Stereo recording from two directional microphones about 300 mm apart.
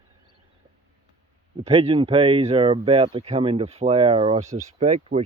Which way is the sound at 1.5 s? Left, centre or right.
Centre.